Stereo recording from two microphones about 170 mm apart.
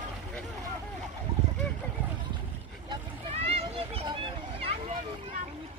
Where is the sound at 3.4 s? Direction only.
35° right (ahead or behind).